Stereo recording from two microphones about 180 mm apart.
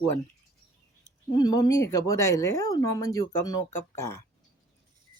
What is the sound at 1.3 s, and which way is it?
Speech, 20° left (ahead or behind).